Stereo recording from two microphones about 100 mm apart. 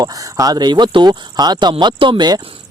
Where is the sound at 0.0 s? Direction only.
40° right (ahead or behind).